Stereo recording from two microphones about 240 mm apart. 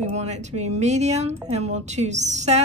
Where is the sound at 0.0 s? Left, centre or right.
Right.